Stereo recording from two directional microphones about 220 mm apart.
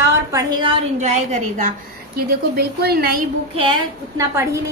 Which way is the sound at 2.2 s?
45° right (ahead or behind).